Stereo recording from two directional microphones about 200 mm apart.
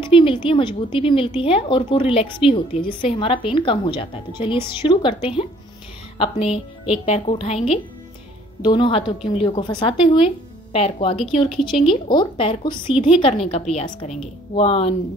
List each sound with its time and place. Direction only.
0.0 s a woman's voice: 25° left (ahead or behind)